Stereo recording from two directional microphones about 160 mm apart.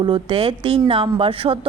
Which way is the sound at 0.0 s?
30° right (ahead or behind).